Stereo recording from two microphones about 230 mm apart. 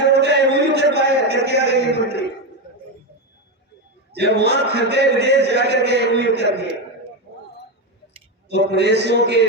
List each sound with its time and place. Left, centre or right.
0.1 s a sound: right
4.1 s a man's voice: right
8.4 s a man's voice: right